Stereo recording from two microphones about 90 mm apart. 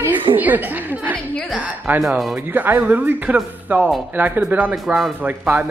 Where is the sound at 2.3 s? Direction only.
20° right (ahead or behind).